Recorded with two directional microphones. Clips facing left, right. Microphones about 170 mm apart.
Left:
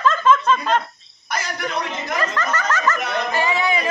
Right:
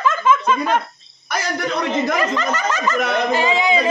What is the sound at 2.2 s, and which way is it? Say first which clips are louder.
Speech: right 3 dB; 15° right (ahead or behind).